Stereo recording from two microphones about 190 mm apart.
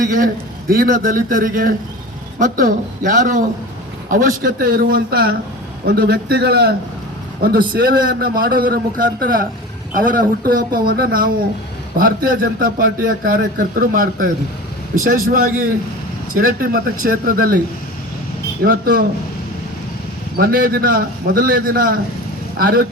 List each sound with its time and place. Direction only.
0.7 s a man's voice: 50° right (ahead or behind)
18.6 s a man's voice: 50° right (ahead or behind)
20.4 s a man's voice: 50° right (ahead or behind)